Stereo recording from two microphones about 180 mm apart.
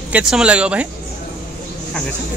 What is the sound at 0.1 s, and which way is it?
Speech, 5° right (ahead or behind).